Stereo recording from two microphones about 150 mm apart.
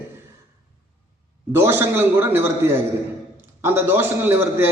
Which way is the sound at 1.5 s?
15° right (ahead or behind).